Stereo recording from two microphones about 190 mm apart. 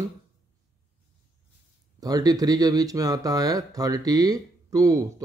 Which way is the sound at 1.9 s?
20° right (ahead or behind).